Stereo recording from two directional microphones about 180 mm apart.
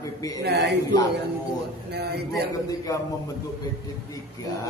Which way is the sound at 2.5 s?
20° left (ahead or behind).